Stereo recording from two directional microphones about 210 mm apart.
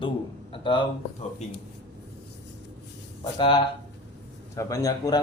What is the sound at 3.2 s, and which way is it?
Speech, 20° left (ahead or behind).